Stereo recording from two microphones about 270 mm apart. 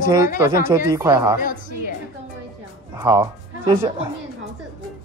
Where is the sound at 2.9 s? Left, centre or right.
Centre.